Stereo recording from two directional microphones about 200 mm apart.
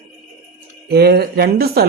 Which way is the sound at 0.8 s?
50° right (ahead or behind).